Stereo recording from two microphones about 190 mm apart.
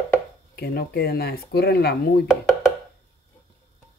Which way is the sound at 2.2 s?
5° right (ahead or behind).